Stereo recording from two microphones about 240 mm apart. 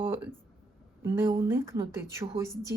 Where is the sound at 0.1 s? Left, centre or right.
Centre.